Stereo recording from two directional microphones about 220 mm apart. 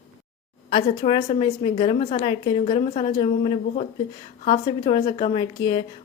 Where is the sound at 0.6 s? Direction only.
25° left (ahead or behind).